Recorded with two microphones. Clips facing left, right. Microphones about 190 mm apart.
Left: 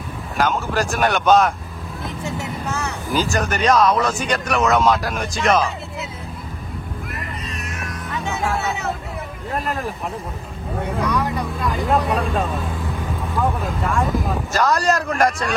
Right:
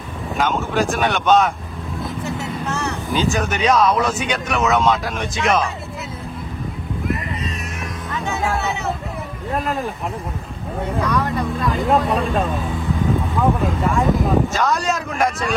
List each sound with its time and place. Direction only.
0.4 s speech: centre (ahead or behind)
2.0 s vehicle: 20° left (ahead or behind)
3.1 s speech: centre (ahead or behind)
7.1 s music: centre (ahead or behind)
9.6 s speech: centre (ahead or behind)
11.1 s speech: centre (ahead or behind)